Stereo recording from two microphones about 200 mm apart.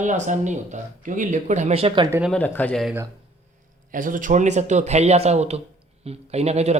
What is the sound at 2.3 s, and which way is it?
Speech, 10° left (ahead or behind).